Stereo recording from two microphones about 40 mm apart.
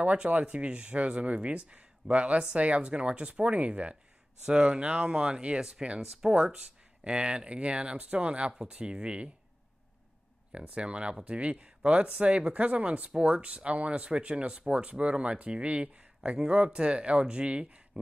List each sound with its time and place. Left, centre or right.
0.0 s speech: right
4.5 s speech: right
10.5 s speech: right